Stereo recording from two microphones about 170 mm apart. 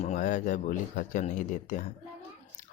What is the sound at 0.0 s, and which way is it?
Speech, 45° left (ahead or behind).